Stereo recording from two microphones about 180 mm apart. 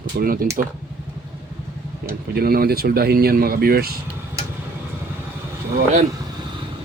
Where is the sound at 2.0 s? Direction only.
55° right (ahead or behind).